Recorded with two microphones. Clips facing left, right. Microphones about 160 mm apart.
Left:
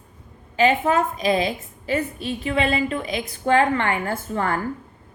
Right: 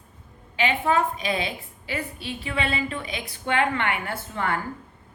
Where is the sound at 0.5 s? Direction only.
40° left (ahead or behind).